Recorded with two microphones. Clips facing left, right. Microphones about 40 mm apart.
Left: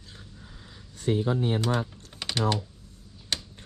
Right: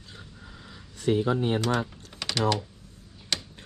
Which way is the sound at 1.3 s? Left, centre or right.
Right.